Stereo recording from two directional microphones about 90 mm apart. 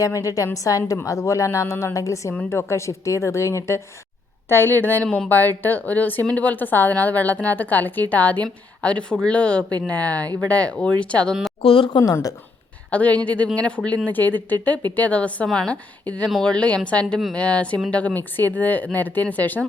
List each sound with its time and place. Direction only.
0.0 s a woman's voice: 40° left (ahead or behind); by 5.0 s 20° left (ahead or behind)
5.0 s speech: 5° left (ahead or behind)
5.3 s a woman's voice: 20° left (ahead or behind)
11.6 s speech: 85° left
12.9 s a woman's voice: 15° left (ahead or behind)